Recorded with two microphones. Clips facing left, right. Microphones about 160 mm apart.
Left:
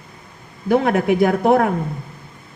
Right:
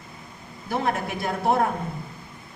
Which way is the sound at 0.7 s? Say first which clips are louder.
Left 10 dB; 65° left (ahead or behind).